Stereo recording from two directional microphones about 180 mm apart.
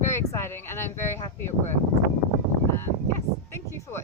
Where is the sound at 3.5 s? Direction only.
15° left (ahead or behind).